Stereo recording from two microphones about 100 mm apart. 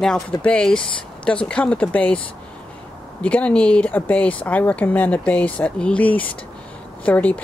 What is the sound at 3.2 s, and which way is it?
Speech, 15° left (ahead or behind).